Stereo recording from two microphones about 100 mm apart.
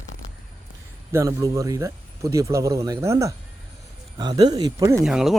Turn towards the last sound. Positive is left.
turn(degrees=-5)  # may be behind; listen again after turning